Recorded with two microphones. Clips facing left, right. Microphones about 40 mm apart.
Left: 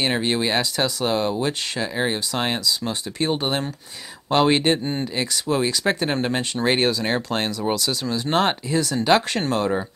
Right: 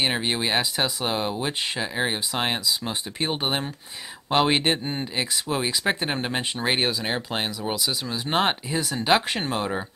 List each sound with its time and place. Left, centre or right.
0.0 s speech: centre